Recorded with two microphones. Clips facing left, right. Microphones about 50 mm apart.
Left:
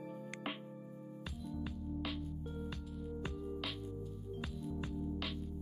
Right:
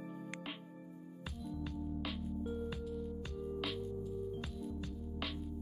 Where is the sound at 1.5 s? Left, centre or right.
Centre.